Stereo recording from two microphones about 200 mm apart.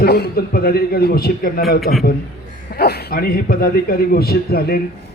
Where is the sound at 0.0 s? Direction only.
50° left (ahead or behind).